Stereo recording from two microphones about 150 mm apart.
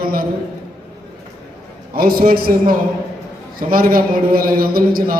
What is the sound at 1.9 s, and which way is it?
Speech, 75° right (ahead or behind).